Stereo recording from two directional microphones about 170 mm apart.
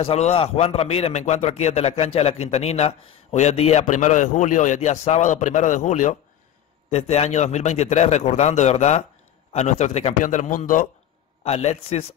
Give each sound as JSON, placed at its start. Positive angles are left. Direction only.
{"t": 0.0, "sound": "a man's voice", "side_deg": 35}
{"t": 11.4, "sound": "a man's voice", "side_deg": 40}